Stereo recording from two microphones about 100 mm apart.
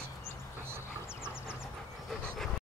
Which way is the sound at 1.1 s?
25° left (ahead or behind).